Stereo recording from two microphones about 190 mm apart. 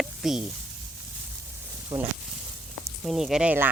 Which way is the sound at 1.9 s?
15° right (ahead or behind).